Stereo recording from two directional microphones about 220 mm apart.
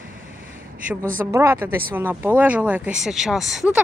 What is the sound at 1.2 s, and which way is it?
Speech, 10° right (ahead or behind).